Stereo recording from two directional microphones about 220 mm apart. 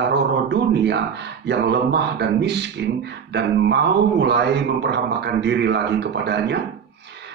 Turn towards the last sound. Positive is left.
turn(degrees=-50)  # may be behind; listen again after turning